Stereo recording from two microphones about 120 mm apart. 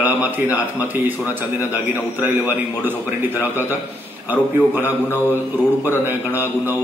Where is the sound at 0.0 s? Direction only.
15° right (ahead or behind).